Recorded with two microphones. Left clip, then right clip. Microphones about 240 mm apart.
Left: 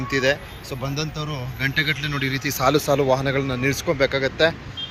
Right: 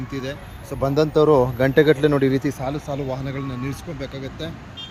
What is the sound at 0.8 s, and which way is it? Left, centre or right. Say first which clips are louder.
Speech: right 13 dB; right.